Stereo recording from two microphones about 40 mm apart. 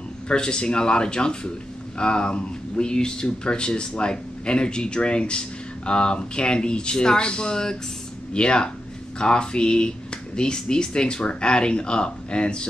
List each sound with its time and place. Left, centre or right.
0.3 s speech: left